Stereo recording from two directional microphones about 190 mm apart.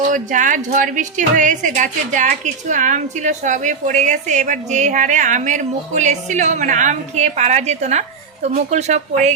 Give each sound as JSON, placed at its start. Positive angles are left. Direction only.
{"t": 0.1, "sound": "a woman's voice", "side_deg": -45}